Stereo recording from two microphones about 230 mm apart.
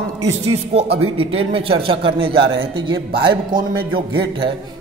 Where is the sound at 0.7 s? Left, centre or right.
Right.